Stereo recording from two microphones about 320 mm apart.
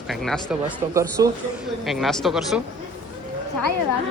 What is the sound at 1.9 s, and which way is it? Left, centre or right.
Speech, centre.